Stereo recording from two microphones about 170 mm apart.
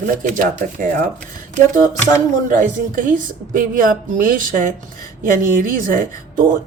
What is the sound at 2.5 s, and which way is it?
A woman's voice, 50° right (ahead or behind).